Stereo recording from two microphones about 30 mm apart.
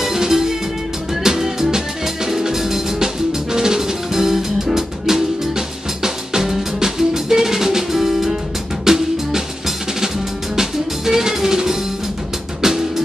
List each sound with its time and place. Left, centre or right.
0.0 s music: centre